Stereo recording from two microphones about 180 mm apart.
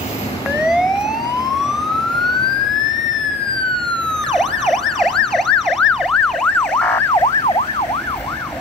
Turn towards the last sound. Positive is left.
turn(degrees=25)  # may be behind; listen again after turning